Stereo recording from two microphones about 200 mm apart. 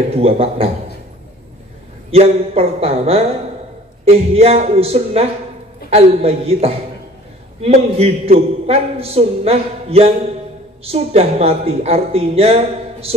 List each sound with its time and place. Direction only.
0.1 s a man's voice: 30° right (ahead or behind)
2.0 s a man's voice: 30° right (ahead or behind)